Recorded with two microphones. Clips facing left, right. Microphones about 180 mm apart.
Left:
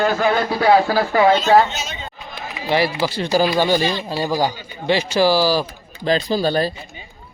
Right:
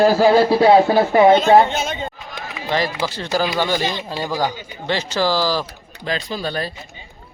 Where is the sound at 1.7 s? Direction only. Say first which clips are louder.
Right 6 dB; 55° right (ahead or behind).